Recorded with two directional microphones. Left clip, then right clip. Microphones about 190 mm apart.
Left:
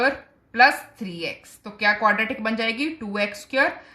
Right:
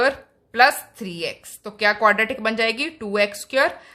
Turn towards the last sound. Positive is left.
turn(degrees=-35)  # may be behind; listen again after turning